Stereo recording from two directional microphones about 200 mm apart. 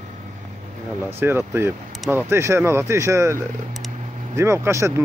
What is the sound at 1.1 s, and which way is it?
Speech, 10° right (ahead or behind).